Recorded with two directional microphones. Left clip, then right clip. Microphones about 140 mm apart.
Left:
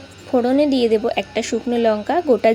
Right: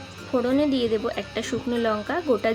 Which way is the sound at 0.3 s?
35° left (ahead or behind).